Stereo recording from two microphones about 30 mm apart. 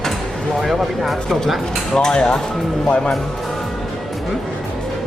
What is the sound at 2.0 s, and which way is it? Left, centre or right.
Speech, left.